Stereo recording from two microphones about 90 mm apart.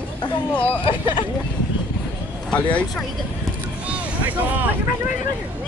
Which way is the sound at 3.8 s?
15° right (ahead or behind).